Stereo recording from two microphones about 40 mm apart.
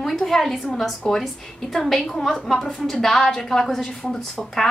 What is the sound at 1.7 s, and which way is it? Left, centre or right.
A woman's voice, centre.